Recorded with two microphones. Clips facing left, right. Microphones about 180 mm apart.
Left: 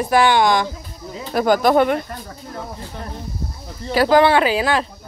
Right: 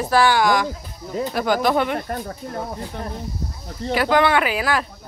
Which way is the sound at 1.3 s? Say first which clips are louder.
Left 5 dB; 45° left (ahead or behind).